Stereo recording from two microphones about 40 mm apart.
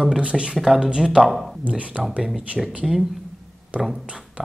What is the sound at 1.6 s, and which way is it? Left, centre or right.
Speech, right.